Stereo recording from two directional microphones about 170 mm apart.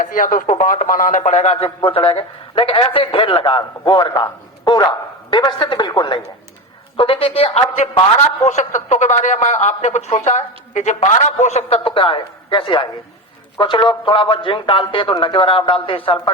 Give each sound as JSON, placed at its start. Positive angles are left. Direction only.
{"t": 0.0, "sound": "a man's voice", "side_deg": 55}